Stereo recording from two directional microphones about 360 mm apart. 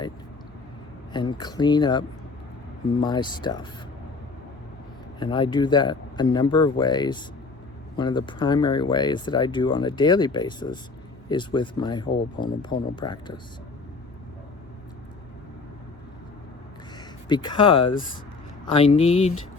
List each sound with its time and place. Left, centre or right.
1.1 s speech: centre
5.2 s speech: centre
17.2 s speech: centre